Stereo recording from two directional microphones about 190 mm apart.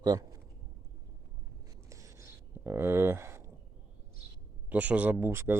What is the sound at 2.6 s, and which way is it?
Speech, 10° right (ahead or behind).